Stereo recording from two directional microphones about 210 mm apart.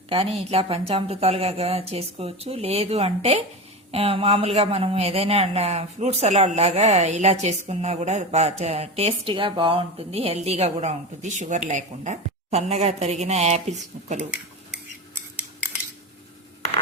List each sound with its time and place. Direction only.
0.1 s speech: 25° right (ahead or behind)